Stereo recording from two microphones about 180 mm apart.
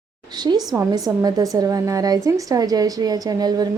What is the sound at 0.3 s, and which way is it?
A woman's voice, 25° right (ahead or behind).